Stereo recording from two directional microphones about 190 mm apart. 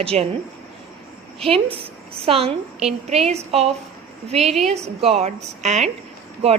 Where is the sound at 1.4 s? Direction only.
30° right (ahead or behind).